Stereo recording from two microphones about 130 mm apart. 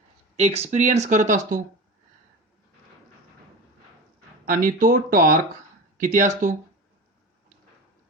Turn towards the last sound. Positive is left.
turn(degrees=-70)  # may be behind; listen again after turning